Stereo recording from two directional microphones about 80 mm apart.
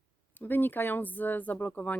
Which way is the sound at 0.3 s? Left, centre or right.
Left.